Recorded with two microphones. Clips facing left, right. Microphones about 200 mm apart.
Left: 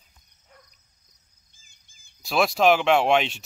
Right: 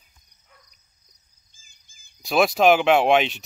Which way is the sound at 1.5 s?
65° left (ahead or behind).